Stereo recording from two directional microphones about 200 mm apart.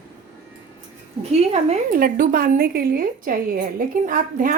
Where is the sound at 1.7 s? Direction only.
45° right (ahead or behind).